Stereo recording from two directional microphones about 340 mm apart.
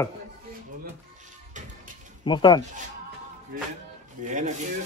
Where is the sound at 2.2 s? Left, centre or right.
Centre.